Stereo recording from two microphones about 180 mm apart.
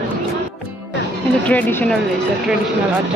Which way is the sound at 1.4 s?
10° left (ahead or behind).